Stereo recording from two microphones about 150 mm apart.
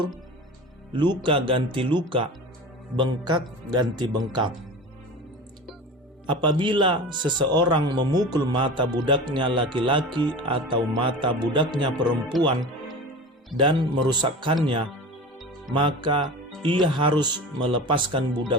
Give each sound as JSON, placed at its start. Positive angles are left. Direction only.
{"t": 0.9, "sound": "speech", "side_deg": -30}
{"t": 6.2, "sound": "speech", "side_deg": -30}